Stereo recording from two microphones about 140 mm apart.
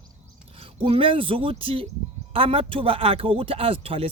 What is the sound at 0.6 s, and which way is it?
Speech, 40° right (ahead or behind).